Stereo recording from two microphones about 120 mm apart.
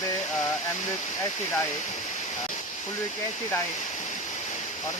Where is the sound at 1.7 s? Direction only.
75° left (ahead or behind).